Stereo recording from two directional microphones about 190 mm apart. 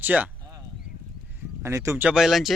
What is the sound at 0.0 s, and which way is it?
Speech, 10° right (ahead or behind).